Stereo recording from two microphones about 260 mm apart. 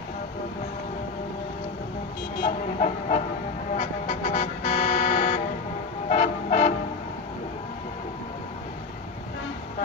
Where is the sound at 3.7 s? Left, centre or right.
Left.